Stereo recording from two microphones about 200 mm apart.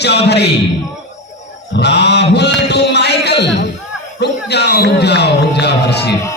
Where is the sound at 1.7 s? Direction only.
60° left (ahead or behind).